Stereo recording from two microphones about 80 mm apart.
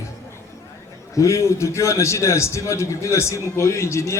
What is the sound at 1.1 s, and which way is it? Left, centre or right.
A man's voice, left.